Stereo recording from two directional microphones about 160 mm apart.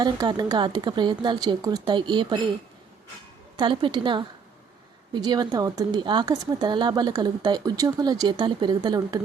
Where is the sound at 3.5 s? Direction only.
30° right (ahead or behind).